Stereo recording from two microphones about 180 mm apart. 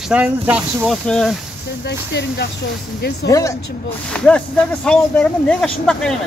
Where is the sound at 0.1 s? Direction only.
5° right (ahead or behind).